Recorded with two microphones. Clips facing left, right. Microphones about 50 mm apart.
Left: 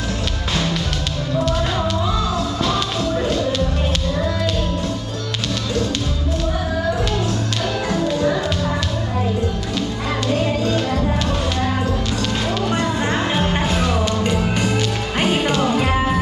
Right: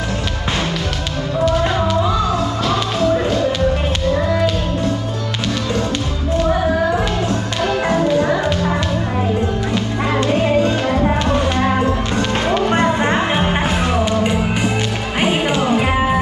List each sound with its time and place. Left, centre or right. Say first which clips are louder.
1.5 s music: right 4 dB; centre
6.5 s music: right 6 dB; right
10.2 s music: right 3 dB; right